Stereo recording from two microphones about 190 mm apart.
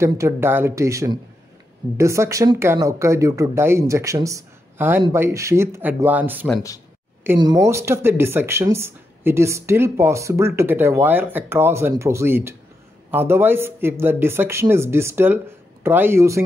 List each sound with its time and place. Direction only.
0.0 s speech: 15° right (ahead or behind)